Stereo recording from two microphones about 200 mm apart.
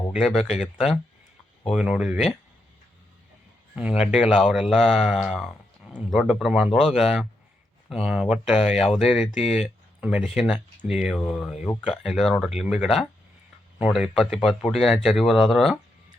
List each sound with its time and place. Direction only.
0.1 s speech: centre (ahead or behind)
3.8 s speech: 5° right (ahead or behind)
9.4 s speech: 30° left (ahead or behind)
9.6 s speech: 5° right (ahead or behind)